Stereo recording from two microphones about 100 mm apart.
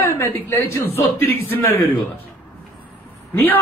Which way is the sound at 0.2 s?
25° left (ahead or behind).